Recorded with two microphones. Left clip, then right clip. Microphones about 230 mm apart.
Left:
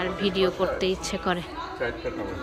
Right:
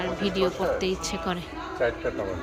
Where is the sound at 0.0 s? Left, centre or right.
Centre.